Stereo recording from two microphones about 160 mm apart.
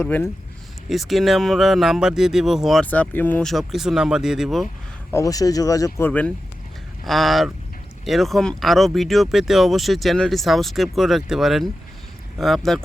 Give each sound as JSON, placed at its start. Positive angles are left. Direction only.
{"t": 0.0, "sound": "speech", "side_deg": 15}
{"t": 0.9, "sound": "speech", "side_deg": 0}
{"t": 5.1, "sound": "speech", "side_deg": 20}
{"t": 6.1, "sound": "speech", "side_deg": 10}